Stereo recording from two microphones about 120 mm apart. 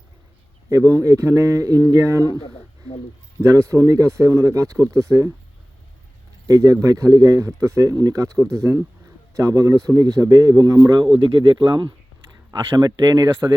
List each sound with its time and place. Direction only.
0.7 s speech: 25° right (ahead or behind)
3.4 s speech: 25° right (ahead or behind)
6.5 s a man's voice: 30° right (ahead or behind)